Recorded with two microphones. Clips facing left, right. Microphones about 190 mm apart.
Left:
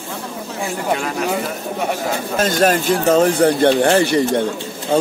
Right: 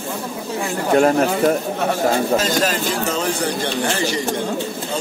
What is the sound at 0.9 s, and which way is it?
Speech, 45° right (ahead or behind).